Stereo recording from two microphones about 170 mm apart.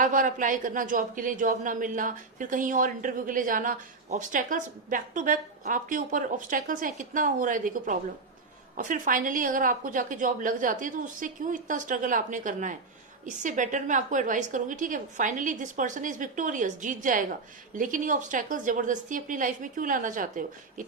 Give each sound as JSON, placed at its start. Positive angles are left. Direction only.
{"t": 0.0, "sound": "speech", "side_deg": -50}